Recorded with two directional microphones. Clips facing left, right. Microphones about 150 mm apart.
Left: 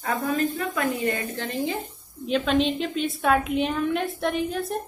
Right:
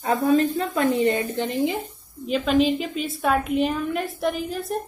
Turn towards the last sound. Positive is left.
turn(degrees=0)  # may be behind; listen again after turning